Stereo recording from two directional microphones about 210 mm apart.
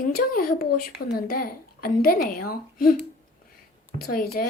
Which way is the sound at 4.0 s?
45° left (ahead or behind).